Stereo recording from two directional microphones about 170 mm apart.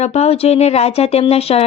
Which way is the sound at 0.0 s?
40° left (ahead or behind).